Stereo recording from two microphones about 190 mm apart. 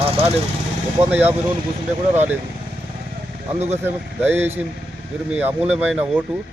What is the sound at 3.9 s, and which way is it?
A man's voice, 10° right (ahead or behind).